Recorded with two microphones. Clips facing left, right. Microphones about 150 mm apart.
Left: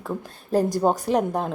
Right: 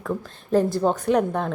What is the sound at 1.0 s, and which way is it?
Speech, 35° left (ahead or behind).